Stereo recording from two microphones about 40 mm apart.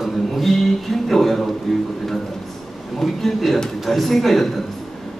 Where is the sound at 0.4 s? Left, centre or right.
Centre.